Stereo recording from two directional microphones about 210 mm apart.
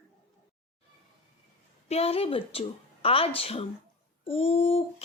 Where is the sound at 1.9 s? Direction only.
30° left (ahead or behind).